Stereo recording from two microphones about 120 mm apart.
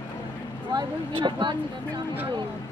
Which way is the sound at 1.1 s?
40° right (ahead or behind).